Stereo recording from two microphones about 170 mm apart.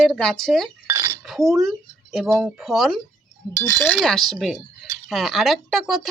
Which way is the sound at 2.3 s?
15° right (ahead or behind).